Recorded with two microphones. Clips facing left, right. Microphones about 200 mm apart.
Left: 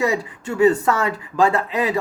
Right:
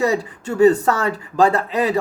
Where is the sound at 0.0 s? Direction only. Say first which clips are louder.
Right 2 dB; 35° right (ahead or behind).